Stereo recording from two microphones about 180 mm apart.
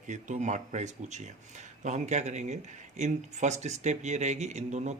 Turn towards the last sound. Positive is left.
turn(degrees=-40)  # may be behind; listen again after turning